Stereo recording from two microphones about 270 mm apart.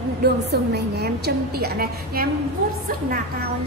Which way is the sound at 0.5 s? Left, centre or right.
Right.